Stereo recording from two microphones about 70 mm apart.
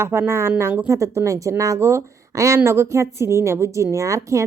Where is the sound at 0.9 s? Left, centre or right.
Right.